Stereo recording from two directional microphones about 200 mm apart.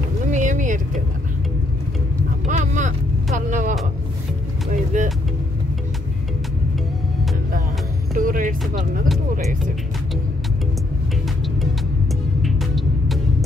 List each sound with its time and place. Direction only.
0.3 s boat: 40° right (ahead or behind)
2.4 s vehicle: 40° right (ahead or behind)
4.9 s vehicle: 40° right (ahead or behind)
8.2 s music: 45° right (ahead or behind)
12.4 s music: centre (ahead or behind)